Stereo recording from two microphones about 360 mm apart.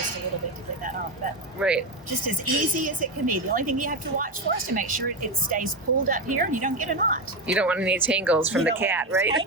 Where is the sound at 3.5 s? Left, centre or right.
Right.